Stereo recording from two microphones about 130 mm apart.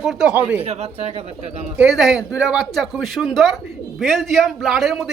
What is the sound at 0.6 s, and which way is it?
Speech, 55° right (ahead or behind).